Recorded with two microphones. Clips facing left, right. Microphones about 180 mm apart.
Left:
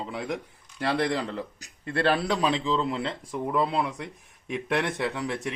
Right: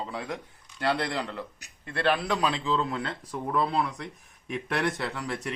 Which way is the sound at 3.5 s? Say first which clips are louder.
Left 1 dB; 15° left (ahead or behind).